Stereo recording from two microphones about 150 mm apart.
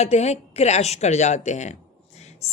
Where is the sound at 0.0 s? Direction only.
45° left (ahead or behind).